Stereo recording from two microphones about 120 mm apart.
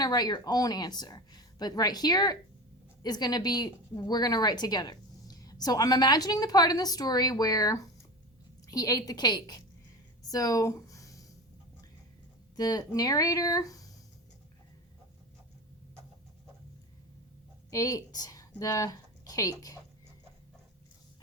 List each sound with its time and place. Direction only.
0.0 s a woman's voice: 35° left (ahead or behind)
10.2 s a sound: 30° left (ahead or behind)
12.5 s a woman's voice: 35° left (ahead or behind)
17.7 s speech: 30° left (ahead or behind)